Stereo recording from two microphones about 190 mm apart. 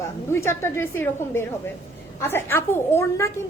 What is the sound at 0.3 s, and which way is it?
A woman's voice, 15° left (ahead or behind).